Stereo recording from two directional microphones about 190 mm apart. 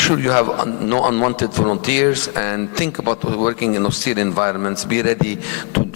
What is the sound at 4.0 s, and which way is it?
Speech, 15° left (ahead or behind).